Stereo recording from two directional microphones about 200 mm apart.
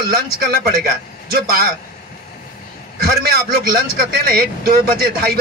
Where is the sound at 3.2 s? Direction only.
50° right (ahead or behind).